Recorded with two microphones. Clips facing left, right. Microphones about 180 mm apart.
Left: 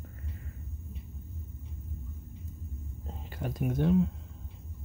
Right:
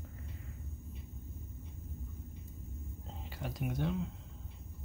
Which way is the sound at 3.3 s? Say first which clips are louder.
Left 6 dB; 50° left (ahead or behind).